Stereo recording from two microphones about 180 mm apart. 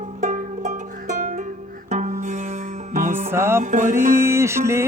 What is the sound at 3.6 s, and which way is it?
Music, 45° right (ahead or behind).